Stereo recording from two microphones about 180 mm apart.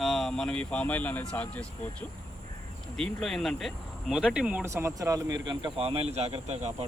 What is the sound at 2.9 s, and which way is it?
Speech, 5° left (ahead or behind).